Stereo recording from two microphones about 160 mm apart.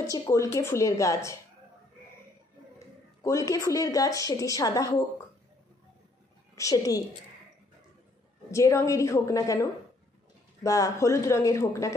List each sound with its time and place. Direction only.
0.0 s a woman's voice: 20° left (ahead or behind)
3.2 s a woman's voice: 20° left (ahead or behind)
6.5 s a woman's voice: 20° left (ahead or behind)
8.5 s a woman's voice: 20° left (ahead or behind)